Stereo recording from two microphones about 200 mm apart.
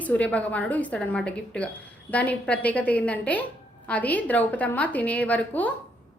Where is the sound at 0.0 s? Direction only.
5° left (ahead or behind).